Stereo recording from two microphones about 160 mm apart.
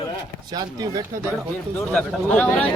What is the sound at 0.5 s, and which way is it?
Speech, 25° right (ahead or behind).